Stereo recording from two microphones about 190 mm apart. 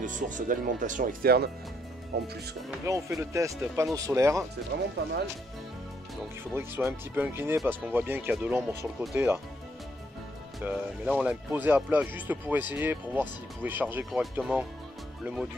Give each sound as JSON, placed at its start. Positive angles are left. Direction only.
{"t": 0.0, "sound": "speech", "side_deg": -40}
{"t": 2.8, "sound": "speech", "side_deg": -15}
{"t": 4.7, "sound": "speech", "side_deg": -50}
{"t": 6.5, "sound": "speech", "side_deg": -10}
{"t": 10.6, "sound": "speech", "side_deg": -10}